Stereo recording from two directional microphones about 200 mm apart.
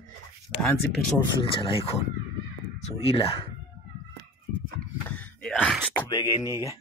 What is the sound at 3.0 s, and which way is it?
Speech, 30° left (ahead or behind).